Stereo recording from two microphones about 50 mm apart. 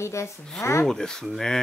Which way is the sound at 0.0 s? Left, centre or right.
Left.